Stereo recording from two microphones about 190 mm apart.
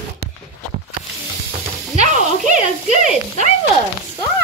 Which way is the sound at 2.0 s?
40° right (ahead or behind).